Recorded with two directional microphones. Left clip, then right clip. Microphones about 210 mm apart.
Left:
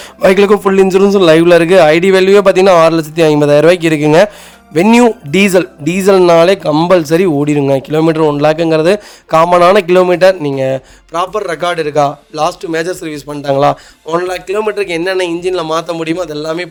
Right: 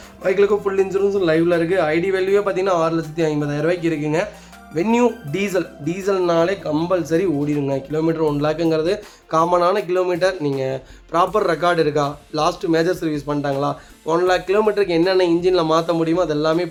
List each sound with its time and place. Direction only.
0.2 s a man's voice: 50° left (ahead or behind)